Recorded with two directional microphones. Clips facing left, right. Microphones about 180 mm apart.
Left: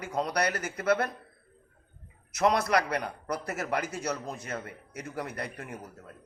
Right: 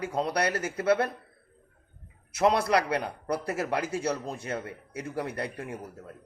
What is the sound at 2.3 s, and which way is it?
Speech, 30° right (ahead or behind).